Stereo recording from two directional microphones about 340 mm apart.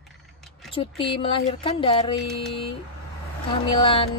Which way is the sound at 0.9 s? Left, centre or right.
Centre.